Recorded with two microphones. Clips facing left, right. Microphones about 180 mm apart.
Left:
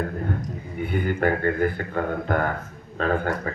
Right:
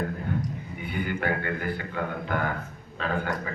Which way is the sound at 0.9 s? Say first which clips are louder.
Left 5 dB; 50° left (ahead or behind).